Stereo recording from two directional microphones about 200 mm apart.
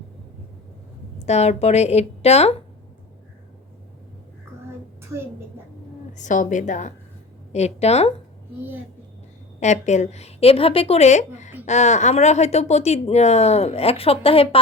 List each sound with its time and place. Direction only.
1.2 s speech: 35° left (ahead or behind)
6.1 s speech: 40° left (ahead or behind)
9.6 s speech: 35° left (ahead or behind)